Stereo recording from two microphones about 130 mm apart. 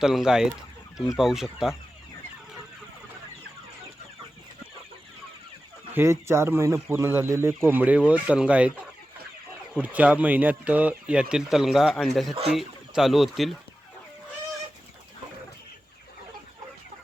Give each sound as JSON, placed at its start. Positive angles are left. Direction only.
{"t": 0.0, "sound": "speech", "side_deg": -5}
{"t": 5.9, "sound": "speech", "side_deg": -20}
{"t": 9.7, "sound": "speech", "side_deg": -10}